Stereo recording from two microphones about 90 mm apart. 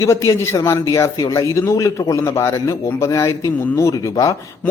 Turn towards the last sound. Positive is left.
turn(degrees=40)  # may be behind; listen again after turning